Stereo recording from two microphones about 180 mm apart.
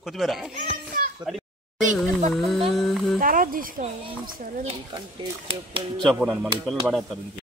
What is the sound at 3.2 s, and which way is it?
A woman's voice, 50° right (ahead or behind).